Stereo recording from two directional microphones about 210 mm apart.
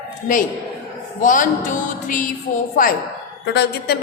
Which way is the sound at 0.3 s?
40° left (ahead or behind).